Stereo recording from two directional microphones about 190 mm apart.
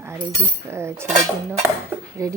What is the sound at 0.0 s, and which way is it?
Speech, 15° right (ahead or behind).